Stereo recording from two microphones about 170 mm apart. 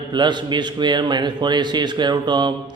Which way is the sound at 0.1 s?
25° right (ahead or behind).